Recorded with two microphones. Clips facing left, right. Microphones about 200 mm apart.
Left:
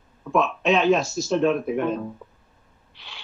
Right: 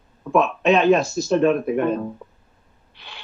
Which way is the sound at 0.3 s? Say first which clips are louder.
Right 3 dB; 55° right (ahead or behind).